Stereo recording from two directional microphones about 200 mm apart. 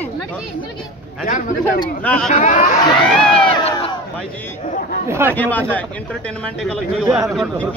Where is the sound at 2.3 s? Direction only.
40° left (ahead or behind).